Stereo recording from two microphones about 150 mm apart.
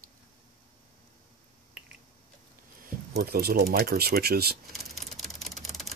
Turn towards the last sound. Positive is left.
turn(degrees=0)  # may be behind; listen again after turning